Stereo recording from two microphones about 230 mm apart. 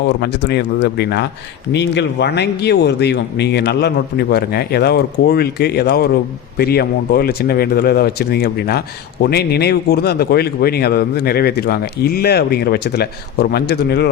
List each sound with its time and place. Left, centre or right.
0.2 s speech: left